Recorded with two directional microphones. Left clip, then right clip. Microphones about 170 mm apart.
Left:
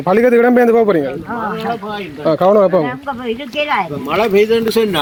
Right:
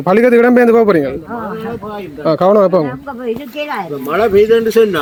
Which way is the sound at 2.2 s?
15° right (ahead or behind).